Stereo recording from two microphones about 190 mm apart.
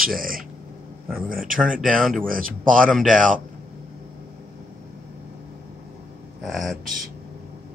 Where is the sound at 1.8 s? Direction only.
Centre (ahead or behind).